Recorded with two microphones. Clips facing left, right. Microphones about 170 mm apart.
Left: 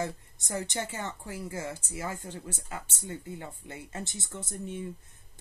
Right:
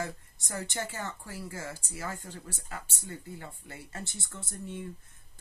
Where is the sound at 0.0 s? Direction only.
20° left (ahead or behind).